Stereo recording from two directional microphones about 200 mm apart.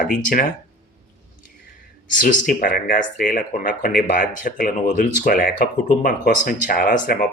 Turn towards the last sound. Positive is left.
turn(degrees=45)  # may be behind; listen again after turning